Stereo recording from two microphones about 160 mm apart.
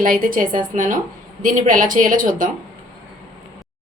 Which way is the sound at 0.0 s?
60° right (ahead or behind).